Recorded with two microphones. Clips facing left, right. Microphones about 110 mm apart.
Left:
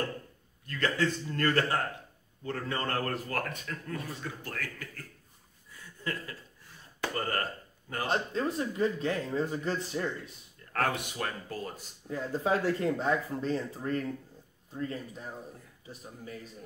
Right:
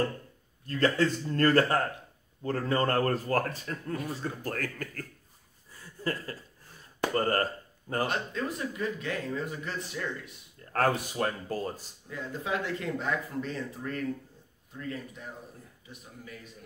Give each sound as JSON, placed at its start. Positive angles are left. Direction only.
{"t": 0.7, "sound": "speech", "side_deg": -35}
{"t": 5.7, "sound": "a sound", "side_deg": -35}
{"t": 7.2, "sound": "speech", "side_deg": -35}
{"t": 8.1, "sound": "speech", "side_deg": 30}
{"t": 10.7, "sound": "speech", "side_deg": -35}
{"t": 12.1, "sound": "speech", "side_deg": 35}